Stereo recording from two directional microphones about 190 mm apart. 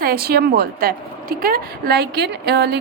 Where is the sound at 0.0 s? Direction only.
55° right (ahead or behind).